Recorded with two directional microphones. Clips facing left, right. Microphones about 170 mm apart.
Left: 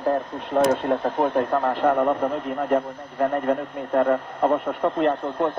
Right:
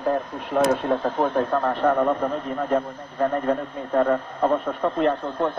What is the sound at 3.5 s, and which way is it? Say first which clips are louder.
A man's voice: even; 15° left (ahead or behind).